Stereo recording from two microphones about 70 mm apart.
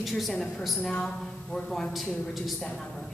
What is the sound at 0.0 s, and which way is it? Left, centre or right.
A woman's voice, centre.